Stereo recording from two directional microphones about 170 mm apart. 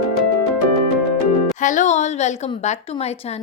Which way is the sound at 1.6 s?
45° left (ahead or behind).